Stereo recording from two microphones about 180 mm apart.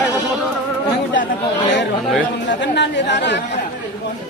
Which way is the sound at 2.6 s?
75° left (ahead or behind).